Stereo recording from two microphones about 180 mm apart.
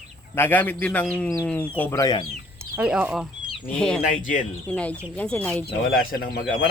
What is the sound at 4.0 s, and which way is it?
Speech, 45° left (ahead or behind).